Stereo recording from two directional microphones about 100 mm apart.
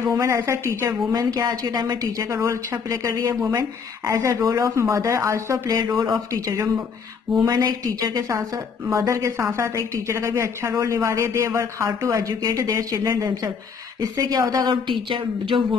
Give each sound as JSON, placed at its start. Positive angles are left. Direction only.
{"t": 0.0, "sound": "a woman's voice", "side_deg": -30}
{"t": 14.7, "sound": "a woman's voice", "side_deg": -55}